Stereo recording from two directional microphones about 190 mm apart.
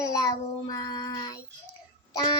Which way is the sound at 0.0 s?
20° left (ahead or behind).